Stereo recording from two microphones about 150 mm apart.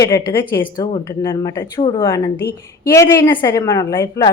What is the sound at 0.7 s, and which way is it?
A woman's voice, 30° left (ahead or behind).